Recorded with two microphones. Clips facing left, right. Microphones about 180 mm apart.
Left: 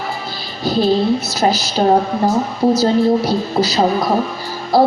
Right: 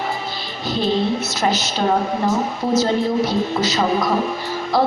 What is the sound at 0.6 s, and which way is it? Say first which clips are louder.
Speech: left 5 dB; 35° left (ahead or behind).